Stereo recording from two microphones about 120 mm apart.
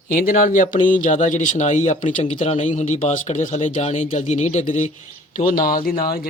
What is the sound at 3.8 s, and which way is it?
Speech, 75° left (ahead or behind).